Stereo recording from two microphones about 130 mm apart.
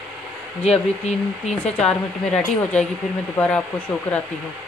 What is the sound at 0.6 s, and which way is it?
Speech, 55° left (ahead or behind).